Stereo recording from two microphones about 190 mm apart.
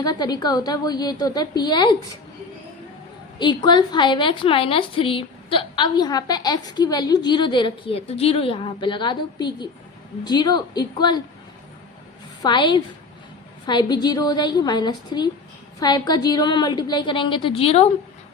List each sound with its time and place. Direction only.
0.0 s a woman's voice: 20° left (ahead or behind)
3.3 s a woman's voice: 25° left (ahead or behind)
12.4 s a woman's voice: 25° left (ahead or behind)